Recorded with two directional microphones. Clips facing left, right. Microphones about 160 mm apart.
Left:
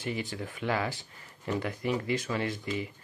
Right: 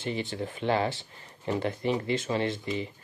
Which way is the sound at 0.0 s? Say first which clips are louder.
Right 3 dB; 25° right (ahead or behind).